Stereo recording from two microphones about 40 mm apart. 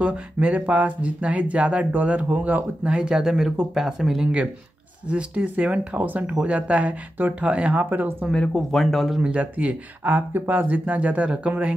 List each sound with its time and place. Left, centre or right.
0.0 s speech: right
1.9 s speech: right
2.9 s speech: centre
5.1 s speech: right
6.0 s speech: right
7.7 s speech: right
8.7 s speech: centre
9.2 s speech: right